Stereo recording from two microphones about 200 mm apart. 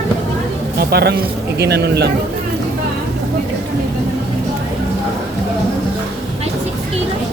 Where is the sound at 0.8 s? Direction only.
50° right (ahead or behind).